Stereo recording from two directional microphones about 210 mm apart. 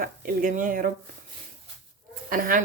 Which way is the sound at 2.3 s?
40° right (ahead or behind).